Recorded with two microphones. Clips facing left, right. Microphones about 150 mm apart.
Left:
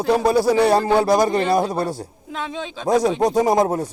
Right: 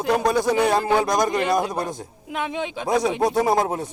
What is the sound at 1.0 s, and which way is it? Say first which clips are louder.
Speech: left 4 dB; 30° left (ahead or behind).